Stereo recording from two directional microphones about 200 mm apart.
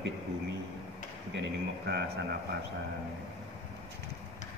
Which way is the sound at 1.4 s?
60° right (ahead or behind).